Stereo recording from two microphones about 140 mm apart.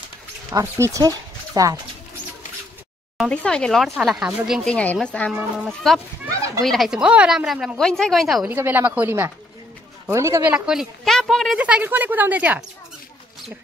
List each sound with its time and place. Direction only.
0.5 s speech: 20° right (ahead or behind)
3.2 s a woman's voice: 5° left (ahead or behind)
4.9 s a woman's voice: 10° left (ahead or behind)
8.5 s speech: 15° right (ahead or behind)
10.5 s a woman's voice: 5° right (ahead or behind)
11.6 s speech: 10° right (ahead or behind)